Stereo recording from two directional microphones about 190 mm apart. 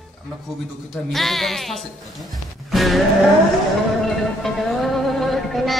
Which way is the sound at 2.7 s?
Centre (ahead or behind).